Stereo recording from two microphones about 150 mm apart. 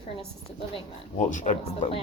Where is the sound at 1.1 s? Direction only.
55° left (ahead or behind).